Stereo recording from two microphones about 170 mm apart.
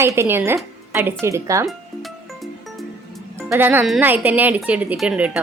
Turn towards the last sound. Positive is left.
turn(degrees=-5)  # may be behind; listen again after turning